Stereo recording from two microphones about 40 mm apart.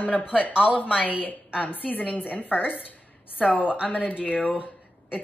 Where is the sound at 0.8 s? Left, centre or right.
Left.